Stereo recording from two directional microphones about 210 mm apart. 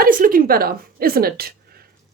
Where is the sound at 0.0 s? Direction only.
40° right (ahead or behind).